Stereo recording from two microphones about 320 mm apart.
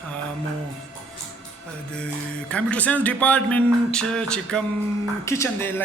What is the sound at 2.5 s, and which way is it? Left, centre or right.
Speech, centre.